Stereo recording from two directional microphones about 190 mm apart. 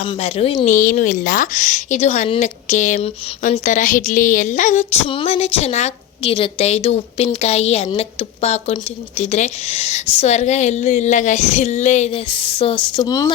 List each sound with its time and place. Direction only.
0.0 s speech: 30° left (ahead or behind)
0.7 s a woman's voice: 45° left (ahead or behind); by 13.3 s 20° left (ahead or behind)